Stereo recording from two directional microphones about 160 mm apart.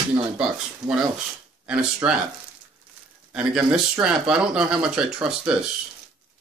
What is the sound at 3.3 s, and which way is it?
Speech, 5° right (ahead or behind).